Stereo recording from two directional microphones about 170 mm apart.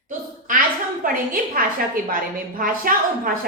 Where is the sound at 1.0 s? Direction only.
55° right (ahead or behind).